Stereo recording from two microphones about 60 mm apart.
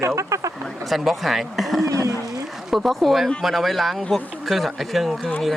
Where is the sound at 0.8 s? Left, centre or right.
Centre.